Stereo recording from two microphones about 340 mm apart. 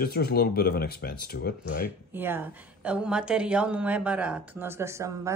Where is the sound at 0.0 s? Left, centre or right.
Left.